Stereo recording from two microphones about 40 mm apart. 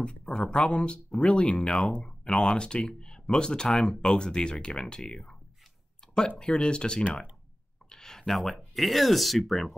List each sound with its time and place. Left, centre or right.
0.0 s speech: left
7.9 s a sound: centre
8.4 s speech: centre